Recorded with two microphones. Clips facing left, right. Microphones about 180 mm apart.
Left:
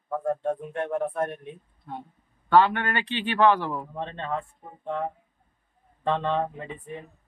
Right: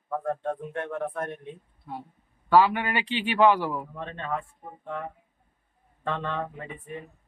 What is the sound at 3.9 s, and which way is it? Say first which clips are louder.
Speech: left 2 dB; 25° left (ahead or behind).